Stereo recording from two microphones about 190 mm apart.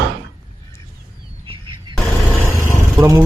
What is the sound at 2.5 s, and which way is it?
Vehicle, 15° left (ahead or behind).